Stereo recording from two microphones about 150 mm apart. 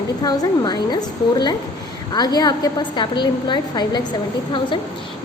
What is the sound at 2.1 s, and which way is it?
A woman's voice, 25° left (ahead or behind).